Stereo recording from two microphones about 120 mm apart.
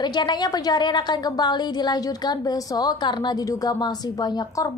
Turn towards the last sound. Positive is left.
turn(degrees=35)  # may be behind; listen again after turning